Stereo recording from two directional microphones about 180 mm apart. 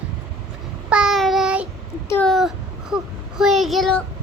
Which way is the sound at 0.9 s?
5° right (ahead or behind).